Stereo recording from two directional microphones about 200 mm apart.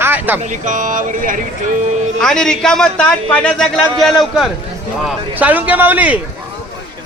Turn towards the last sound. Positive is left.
turn(degrees=-10)  # may be behind; listen again after turning